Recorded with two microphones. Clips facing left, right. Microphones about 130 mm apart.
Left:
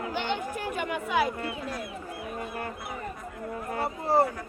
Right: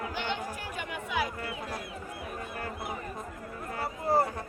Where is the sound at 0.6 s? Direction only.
65° left (ahead or behind).